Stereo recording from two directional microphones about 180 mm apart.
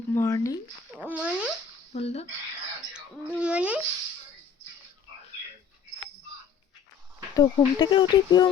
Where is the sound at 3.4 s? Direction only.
5° right (ahead or behind).